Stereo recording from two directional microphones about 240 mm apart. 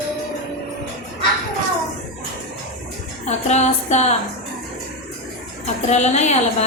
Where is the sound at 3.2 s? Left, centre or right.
Left.